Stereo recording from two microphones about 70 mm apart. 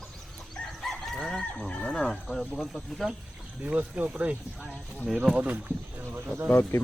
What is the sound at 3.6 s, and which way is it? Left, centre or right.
Speech, right.